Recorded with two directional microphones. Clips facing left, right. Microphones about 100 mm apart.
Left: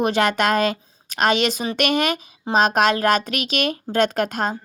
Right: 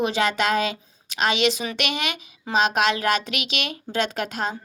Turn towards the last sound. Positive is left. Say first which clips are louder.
# left 5 dB
turn(degrees=50)  # may be behind; listen again after turning